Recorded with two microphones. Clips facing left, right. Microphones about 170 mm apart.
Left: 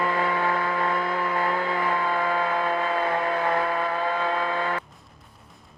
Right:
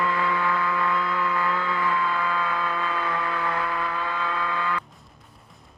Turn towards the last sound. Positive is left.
turn(degrees=35)  # may be behind; listen again after turning